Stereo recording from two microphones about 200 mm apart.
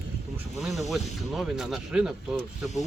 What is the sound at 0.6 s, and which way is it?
Speech, centre (ahead or behind).